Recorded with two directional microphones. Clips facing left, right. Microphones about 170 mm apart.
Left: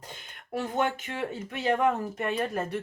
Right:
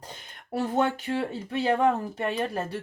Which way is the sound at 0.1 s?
35° right (ahead or behind).